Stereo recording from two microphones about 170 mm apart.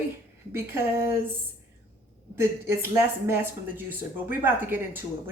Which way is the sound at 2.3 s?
15° right (ahead or behind).